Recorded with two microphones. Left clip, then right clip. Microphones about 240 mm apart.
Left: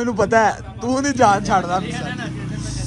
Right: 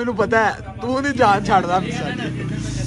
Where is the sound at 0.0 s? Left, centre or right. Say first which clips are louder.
Left 1 dB; centre.